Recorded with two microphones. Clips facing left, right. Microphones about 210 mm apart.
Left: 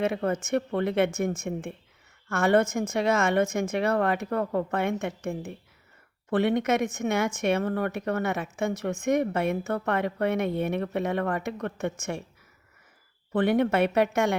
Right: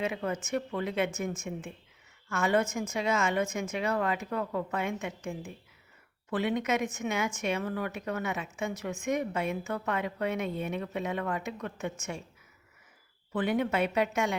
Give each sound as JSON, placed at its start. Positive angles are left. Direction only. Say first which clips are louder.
{"t": 0.0, "sound": "a woman's voice", "louder": "left 6 dB", "side_deg": 65}
{"t": 0.3, "sound": "a woman's voice", "louder": "left 6 dB", "side_deg": 55}
{"t": 6.3, "sound": "a woman's voice", "louder": "left 5 dB", "side_deg": 65}
{"t": 13.3, "sound": "a woman's voice", "louder": "left 6 dB", "side_deg": 65}